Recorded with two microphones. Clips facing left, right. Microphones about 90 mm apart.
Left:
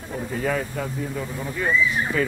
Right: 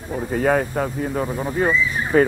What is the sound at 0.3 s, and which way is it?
Speech, 55° right (ahead or behind).